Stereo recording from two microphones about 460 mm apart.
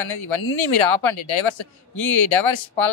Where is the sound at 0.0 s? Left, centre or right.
Left.